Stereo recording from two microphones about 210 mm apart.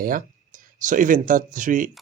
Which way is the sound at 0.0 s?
40° right (ahead or behind).